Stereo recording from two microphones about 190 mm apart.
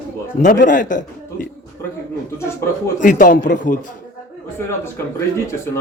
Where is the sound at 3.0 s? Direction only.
45° left (ahead or behind).